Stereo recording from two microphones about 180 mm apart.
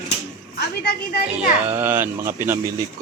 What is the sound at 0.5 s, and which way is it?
Speech, 65° left (ahead or behind).